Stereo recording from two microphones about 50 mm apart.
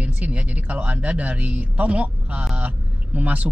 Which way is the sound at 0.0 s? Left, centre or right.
Right.